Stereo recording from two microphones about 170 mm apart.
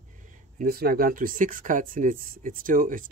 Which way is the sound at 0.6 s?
60° right (ahead or behind).